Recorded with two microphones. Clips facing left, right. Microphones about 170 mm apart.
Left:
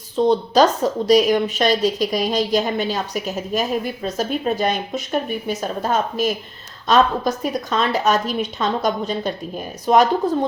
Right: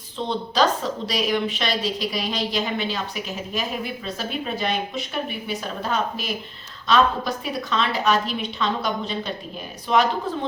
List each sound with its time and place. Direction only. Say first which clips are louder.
0.2 s a woman's voice: left 7 dB; 45° left (ahead or behind)